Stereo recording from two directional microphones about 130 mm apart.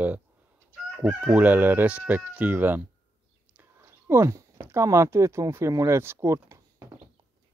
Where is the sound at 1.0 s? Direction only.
10° right (ahead or behind).